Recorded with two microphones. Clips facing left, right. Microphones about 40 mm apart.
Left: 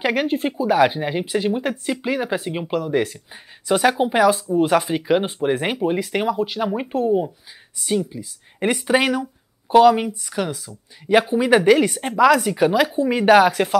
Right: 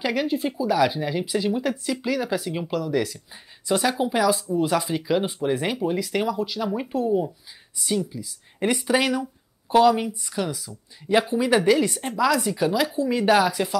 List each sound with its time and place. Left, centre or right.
0.0 s speech: left